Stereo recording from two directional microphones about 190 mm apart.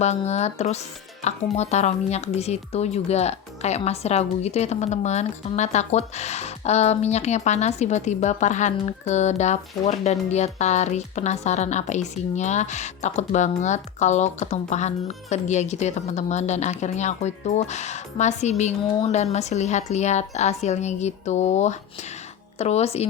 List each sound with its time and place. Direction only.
0.0 s speech: 35° left (ahead or behind)